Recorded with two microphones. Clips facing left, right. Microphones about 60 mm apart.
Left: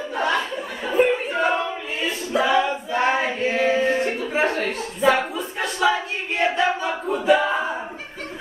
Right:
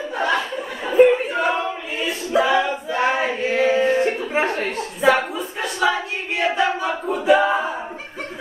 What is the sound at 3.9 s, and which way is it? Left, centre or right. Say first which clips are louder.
Chuckle: right 2 dB; right.